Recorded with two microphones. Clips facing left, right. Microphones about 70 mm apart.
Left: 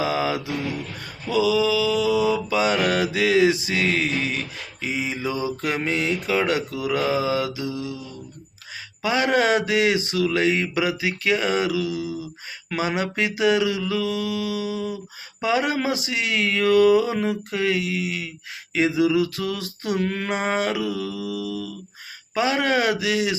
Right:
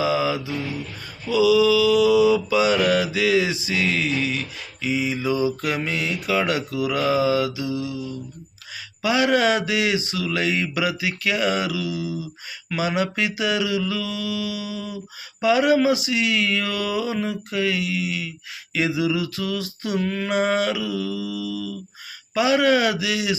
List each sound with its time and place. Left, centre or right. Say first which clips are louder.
0.0 s music: right 2 dB; left
1.3 s mantra: right 3 dB; left
18.7 s a sound: left 3 dB; left
22.4 s mantra: right 3 dB; left